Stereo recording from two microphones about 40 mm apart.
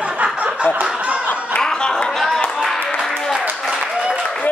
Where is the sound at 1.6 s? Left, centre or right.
Centre.